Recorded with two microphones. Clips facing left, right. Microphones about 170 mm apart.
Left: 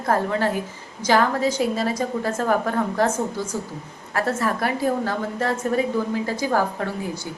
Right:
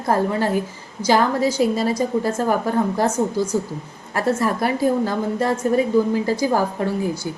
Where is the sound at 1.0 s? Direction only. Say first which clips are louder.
Right 2 dB; 10° right (ahead or behind).